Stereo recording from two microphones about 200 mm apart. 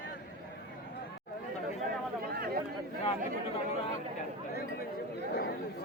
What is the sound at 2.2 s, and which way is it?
Chatter, 50° right (ahead or behind).